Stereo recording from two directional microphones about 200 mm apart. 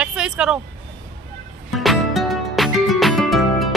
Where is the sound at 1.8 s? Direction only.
Centre (ahead or behind).